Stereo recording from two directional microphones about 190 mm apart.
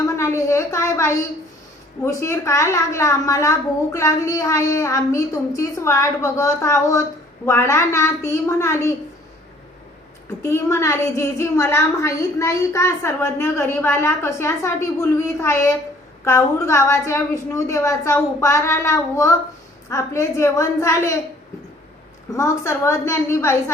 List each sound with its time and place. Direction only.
0.0 s a sound: 15° left (ahead or behind)
2.0 s a woman's voice: 15° left (ahead or behind)
10.4 s a woman's voice: 15° left (ahead or behind)
22.4 s a woman's voice: 15° left (ahead or behind)